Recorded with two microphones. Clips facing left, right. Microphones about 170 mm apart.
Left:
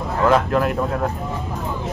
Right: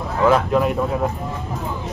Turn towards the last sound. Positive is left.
turn(degrees=0)  # may be behind; listen again after turning